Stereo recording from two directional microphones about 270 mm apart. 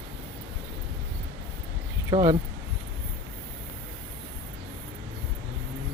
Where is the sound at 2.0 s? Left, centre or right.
Centre.